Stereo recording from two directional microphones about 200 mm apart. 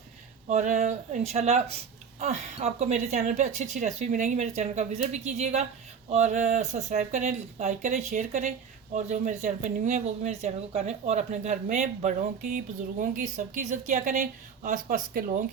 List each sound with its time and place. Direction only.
0.4 s speech: 35° right (ahead or behind)